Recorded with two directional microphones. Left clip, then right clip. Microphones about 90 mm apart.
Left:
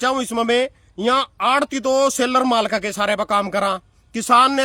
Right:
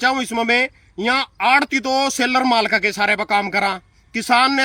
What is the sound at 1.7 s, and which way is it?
Speech, 55° left (ahead or behind).